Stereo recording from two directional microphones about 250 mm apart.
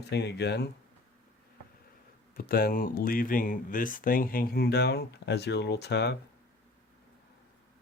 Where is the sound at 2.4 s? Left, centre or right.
Left.